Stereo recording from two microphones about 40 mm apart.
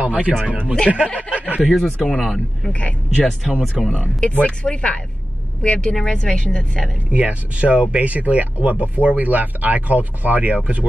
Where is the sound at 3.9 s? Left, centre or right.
Left.